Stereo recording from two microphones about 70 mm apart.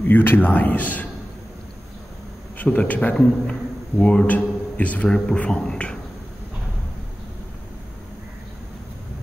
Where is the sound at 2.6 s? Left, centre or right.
Left.